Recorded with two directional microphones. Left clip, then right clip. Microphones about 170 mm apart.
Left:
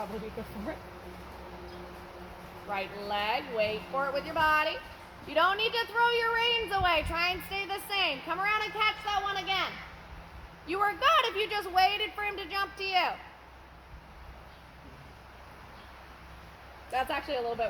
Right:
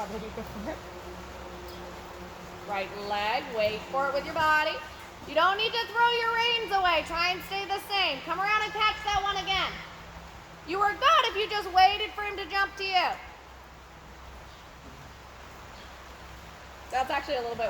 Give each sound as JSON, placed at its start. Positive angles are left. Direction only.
{"t": 2.7, "sound": "a woman's voice", "side_deg": 45}
{"t": 10.7, "sound": "a woman's voice", "side_deg": 45}
{"t": 16.9, "sound": "a woman's voice", "side_deg": 45}